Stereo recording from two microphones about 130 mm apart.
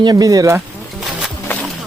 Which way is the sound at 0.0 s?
30° right (ahead or behind).